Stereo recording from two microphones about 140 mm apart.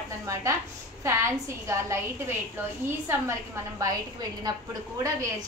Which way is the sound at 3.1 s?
20° right (ahead or behind).